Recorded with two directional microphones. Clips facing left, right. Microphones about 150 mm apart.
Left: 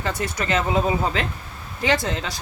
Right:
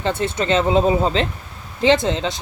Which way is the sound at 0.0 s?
25° right (ahead or behind).